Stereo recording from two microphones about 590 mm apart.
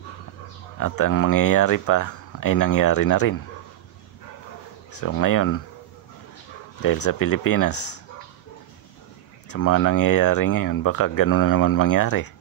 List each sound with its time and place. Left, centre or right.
0.7 s speech: left
5.0 s speech: left
6.8 s speech: left
9.5 s speech: left